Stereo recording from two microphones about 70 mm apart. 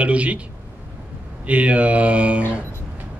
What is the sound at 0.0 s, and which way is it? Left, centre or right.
Speech, centre.